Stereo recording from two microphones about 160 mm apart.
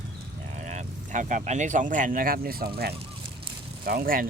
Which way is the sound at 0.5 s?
45° right (ahead or behind).